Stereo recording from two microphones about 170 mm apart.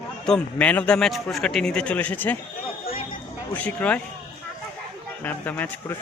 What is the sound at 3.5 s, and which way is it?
Speech, 10° left (ahead or behind).